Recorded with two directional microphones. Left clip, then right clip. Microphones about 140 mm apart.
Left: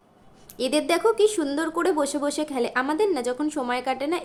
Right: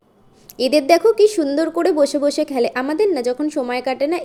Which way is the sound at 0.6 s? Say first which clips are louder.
Right 8 dB; 20° right (ahead or behind).